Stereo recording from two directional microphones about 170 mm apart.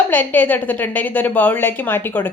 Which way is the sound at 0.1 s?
10° left (ahead or behind).